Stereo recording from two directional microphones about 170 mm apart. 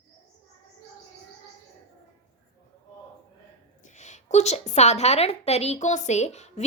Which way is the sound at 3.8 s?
45° left (ahead or behind).